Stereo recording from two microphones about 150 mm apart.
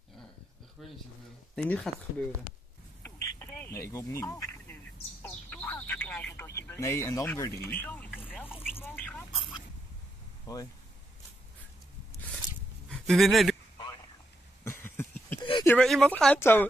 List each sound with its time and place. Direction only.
0.8 s speech: centre (ahead or behind)
3.0 s a sound: 15° left (ahead or behind)
3.9 s speech: 20° left (ahead or behind)
9.3 s speech: 35° left (ahead or behind)
10.4 s speech: 25° left (ahead or behind)
12.1 s a sound: 10° left (ahead or behind)
12.9 s speech: centre (ahead or behind)
14.6 s a sound: 15° left (ahead or behind)
15.9 s speech: 5° left (ahead or behind)